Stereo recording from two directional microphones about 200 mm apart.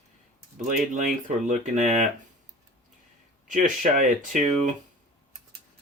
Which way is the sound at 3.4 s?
40° right (ahead or behind).